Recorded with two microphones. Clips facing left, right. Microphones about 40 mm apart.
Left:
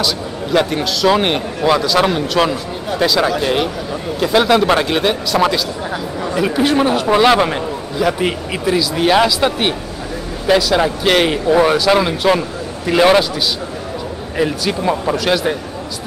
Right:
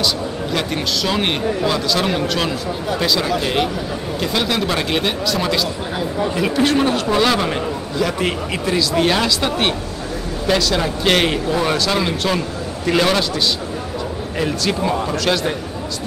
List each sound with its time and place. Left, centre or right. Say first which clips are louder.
0.0 s a man's voice: left 1 dB; centre
7.1 s speech: left 5 dB; left
7.5 s a man's voice: left 1 dB; centre
14.4 s a man's voice: left 3 dB; centre